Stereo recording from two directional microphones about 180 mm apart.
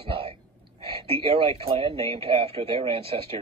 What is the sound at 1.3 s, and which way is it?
Speech, 30° right (ahead or behind).